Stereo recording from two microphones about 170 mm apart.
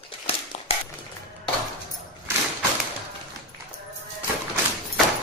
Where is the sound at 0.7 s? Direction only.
35° left (ahead or behind).